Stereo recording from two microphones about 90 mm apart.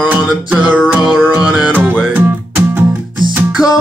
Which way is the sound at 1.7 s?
20° right (ahead or behind).